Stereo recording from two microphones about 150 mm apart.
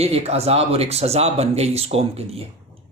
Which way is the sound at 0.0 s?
45° right (ahead or behind).